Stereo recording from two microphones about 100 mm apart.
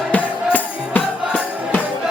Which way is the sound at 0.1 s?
15° left (ahead or behind).